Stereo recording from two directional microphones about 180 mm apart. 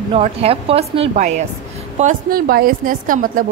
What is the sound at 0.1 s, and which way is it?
A woman's voice, 35° right (ahead or behind).